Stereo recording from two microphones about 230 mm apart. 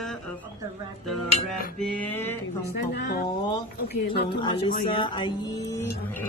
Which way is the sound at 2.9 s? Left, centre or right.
Left.